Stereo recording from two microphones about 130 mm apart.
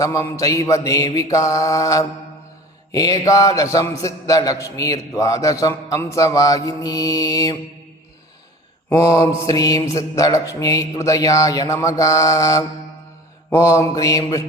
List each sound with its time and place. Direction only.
0.0 s a man's voice: 25° left (ahead or behind)
8.9 s a man's voice: 25° left (ahead or behind)